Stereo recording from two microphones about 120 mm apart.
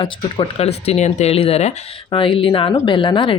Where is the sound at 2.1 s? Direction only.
45° left (ahead or behind).